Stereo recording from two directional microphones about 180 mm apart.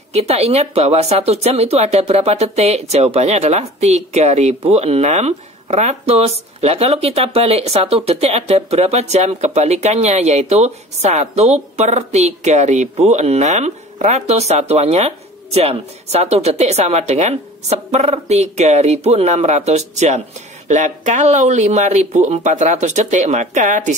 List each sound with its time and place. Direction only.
0.1 s speech: 35° right (ahead or behind)